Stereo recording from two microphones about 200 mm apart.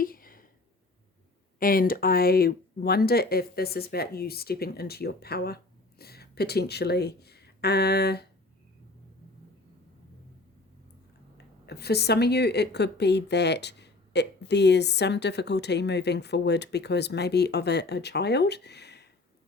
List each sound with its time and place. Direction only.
0.0 s a sound: 45° left (ahead or behind)
1.5 s speech: 45° left (ahead or behind)
11.3 s speech: 55° left (ahead or behind)